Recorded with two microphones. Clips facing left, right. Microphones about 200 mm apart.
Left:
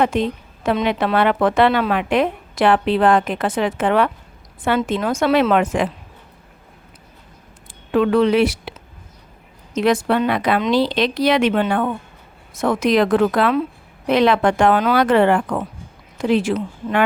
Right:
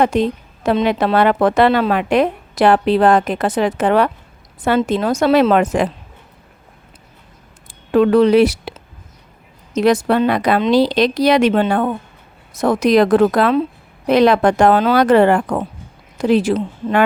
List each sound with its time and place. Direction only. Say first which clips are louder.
0.0 s a woman's voice: right 3 dB; 40° right (ahead or behind)
7.9 s a woman's voice: right 4 dB; 40° right (ahead or behind)
9.7 s a woman's voice: right 3 dB; 40° right (ahead or behind)